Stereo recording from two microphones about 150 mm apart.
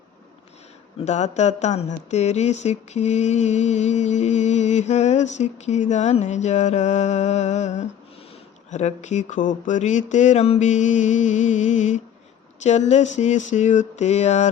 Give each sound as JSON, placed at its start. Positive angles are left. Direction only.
{"t": 1.0, "sound": "speech", "side_deg": 50}